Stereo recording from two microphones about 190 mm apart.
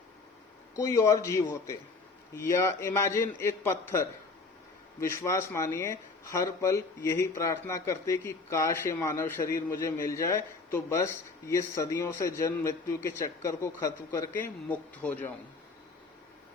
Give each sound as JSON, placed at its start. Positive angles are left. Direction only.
{"t": 0.8, "sound": "speech", "side_deg": 15}